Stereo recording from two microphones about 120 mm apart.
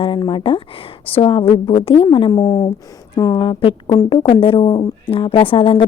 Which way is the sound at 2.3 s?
30° left (ahead or behind).